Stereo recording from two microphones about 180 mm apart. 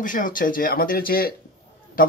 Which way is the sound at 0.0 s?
50° left (ahead or behind).